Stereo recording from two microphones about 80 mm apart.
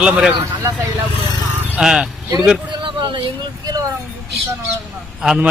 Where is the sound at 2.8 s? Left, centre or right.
Right.